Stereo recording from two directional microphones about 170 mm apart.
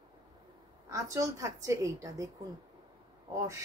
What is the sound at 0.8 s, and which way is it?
A woman's voice, 20° right (ahead or behind).